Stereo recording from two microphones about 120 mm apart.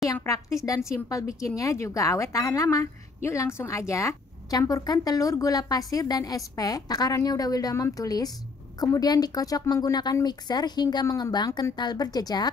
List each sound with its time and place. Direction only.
0.0 s a woman's voice: 25° left (ahead or behind)